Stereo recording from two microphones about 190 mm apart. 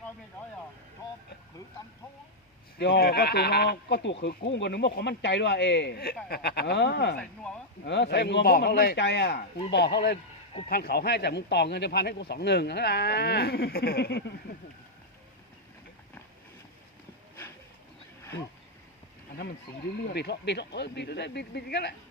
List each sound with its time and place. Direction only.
2.7 s speech: 55° left (ahead or behind)
18.2 s a sound: 15° left (ahead or behind)
20.1 s speech: 60° left (ahead or behind)